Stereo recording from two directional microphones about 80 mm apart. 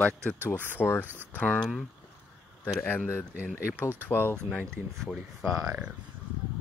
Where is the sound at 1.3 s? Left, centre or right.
Centre.